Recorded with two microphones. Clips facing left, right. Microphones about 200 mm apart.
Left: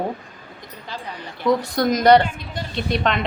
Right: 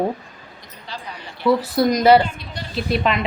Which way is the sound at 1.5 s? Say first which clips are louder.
Right 2 dB; 5° right (ahead or behind).